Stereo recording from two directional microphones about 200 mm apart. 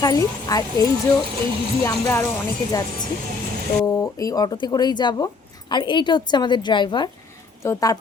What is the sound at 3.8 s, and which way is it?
Speech, 15° left (ahead or behind).